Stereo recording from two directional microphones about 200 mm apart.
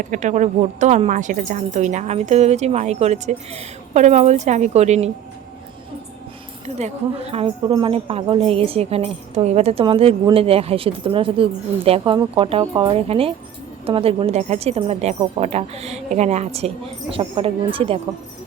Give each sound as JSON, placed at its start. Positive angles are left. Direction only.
{"t": 0.0, "sound": "a woman's voice", "side_deg": -40}
{"t": 6.7, "sound": "a woman's voice", "side_deg": -30}